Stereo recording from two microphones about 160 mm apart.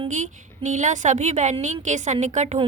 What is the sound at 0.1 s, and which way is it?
A woman's voice, 50° right (ahead or behind).